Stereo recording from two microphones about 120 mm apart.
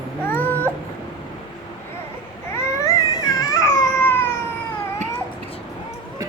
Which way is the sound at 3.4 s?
25° left (ahead or behind).